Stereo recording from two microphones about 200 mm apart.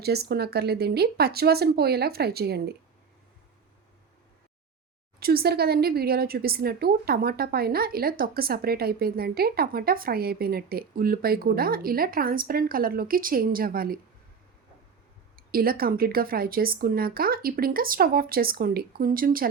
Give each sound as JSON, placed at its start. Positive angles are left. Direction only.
{"t": 0.0, "sound": "a woman's voice", "side_deg": -55}
{"t": 5.2, "sound": "a woman's voice", "side_deg": -50}
{"t": 15.5, "sound": "a woman's voice", "side_deg": -50}